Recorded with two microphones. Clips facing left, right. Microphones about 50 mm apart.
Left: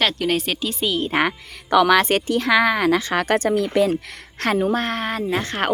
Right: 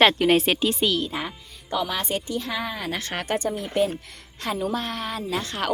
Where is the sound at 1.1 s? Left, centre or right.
Left.